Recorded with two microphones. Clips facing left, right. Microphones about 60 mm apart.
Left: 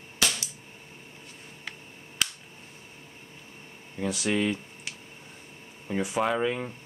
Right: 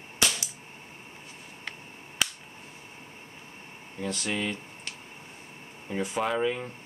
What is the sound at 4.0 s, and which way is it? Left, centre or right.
Speech, centre.